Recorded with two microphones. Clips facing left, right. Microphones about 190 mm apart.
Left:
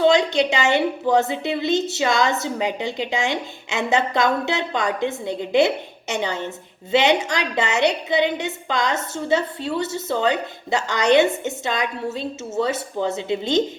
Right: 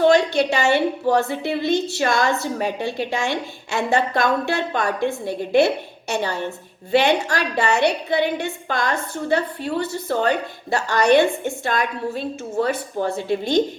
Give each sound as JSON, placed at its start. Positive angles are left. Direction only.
{"t": 0.1, "sound": "a woman's voice", "side_deg": 20}